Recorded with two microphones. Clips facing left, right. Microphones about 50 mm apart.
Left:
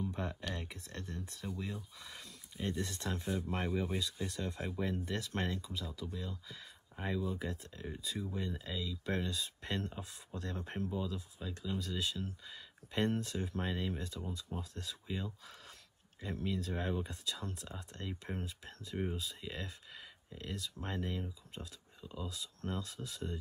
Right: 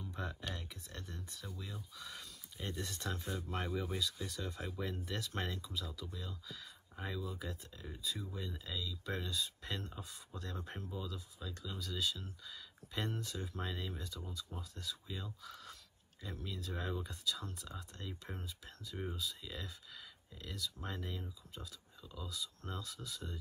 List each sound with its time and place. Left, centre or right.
0.0 s a sound: left
0.6 s speech: left
3.6 s speech: centre
3.9 s speech: left
8.2 s speech: centre
8.5 s speech: left